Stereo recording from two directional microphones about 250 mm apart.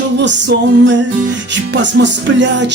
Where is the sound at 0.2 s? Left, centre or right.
Right.